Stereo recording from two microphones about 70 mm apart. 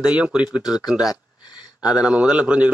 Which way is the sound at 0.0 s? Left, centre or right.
Centre.